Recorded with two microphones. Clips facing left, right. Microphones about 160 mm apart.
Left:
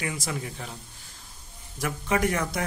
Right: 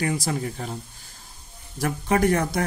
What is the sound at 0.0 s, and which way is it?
Speech, 45° right (ahead or behind).